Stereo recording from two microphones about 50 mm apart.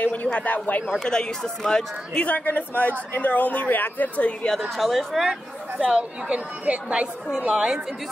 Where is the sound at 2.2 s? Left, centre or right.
Left.